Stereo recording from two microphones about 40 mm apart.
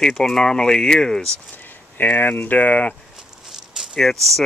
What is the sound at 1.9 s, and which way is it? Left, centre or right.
Speech, left.